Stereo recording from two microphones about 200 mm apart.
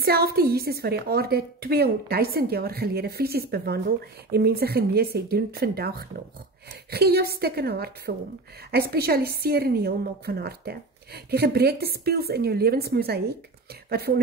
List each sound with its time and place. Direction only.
0.0 s a woman's voice: 50° right (ahead or behind)